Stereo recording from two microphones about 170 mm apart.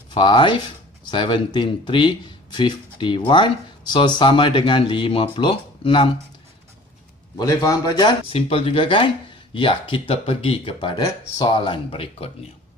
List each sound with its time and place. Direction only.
0.1 s speech: 30° left (ahead or behind)
7.3 s speech: 20° left (ahead or behind)